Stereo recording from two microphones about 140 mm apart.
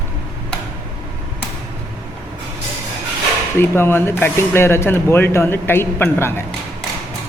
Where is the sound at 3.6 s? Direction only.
15° left (ahead or behind).